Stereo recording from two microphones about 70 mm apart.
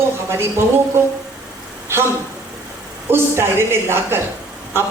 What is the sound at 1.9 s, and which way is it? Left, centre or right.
Speech, right.